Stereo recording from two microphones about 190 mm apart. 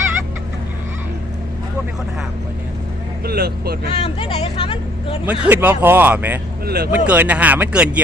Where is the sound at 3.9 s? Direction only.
30° left (ahead or behind).